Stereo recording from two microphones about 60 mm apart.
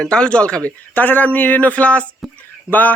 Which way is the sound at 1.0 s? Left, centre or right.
Left.